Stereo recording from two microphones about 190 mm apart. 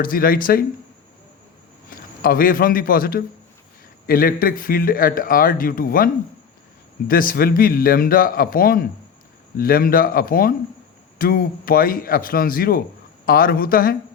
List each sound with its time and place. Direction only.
0.0 s speech: 50° left (ahead or behind)
1.9 s a man's voice: 50° left (ahead or behind)
7.1 s speech: 50° left (ahead or behind)